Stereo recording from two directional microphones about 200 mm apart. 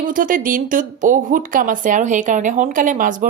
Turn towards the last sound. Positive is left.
turn(degrees=-40)  # may be behind; listen again after turning